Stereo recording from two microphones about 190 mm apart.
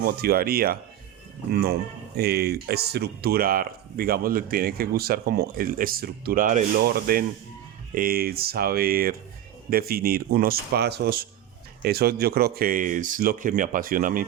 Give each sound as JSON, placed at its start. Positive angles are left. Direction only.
{"t": 0.0, "sound": "speech", "side_deg": -55}